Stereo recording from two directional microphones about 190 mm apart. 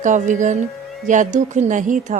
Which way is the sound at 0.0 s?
40° right (ahead or behind).